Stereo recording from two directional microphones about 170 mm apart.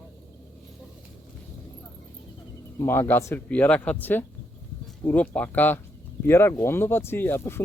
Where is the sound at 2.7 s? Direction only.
15° left (ahead or behind).